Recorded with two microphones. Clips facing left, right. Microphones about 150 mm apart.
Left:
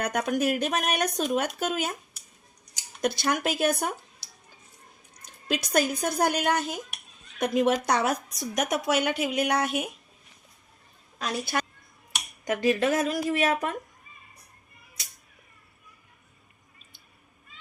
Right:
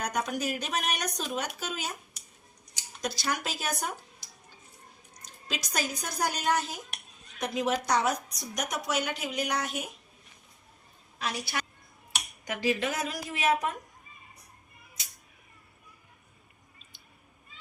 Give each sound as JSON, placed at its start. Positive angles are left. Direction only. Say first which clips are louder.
{"t": 0.0, "sound": "speech", "louder": "left 5 dB", "side_deg": 60}
{"t": 3.0, "sound": "speech", "louder": "left 6 dB", "side_deg": 55}
{"t": 5.2, "sound": "a woman's voice", "louder": "left 8 dB", "side_deg": 55}
{"t": 11.2, "sound": "speech", "louder": "left 5 dB", "side_deg": 45}